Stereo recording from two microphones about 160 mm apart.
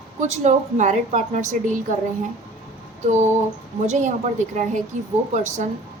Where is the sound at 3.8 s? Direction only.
45° right (ahead or behind).